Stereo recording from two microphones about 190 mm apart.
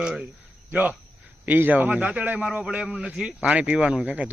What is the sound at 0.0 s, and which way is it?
A man's voice, 5° right (ahead or behind).